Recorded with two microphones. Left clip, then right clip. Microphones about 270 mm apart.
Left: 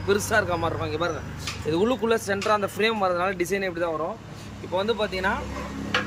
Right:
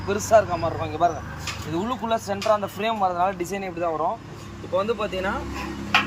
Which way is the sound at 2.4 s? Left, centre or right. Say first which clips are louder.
Right 1 dB; left.